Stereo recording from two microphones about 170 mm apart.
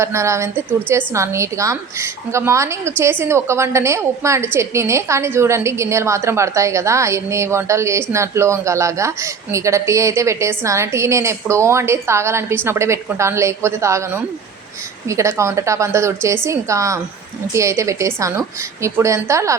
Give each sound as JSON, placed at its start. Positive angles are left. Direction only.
{"t": 0.0, "sound": "a woman's voice", "side_deg": -15}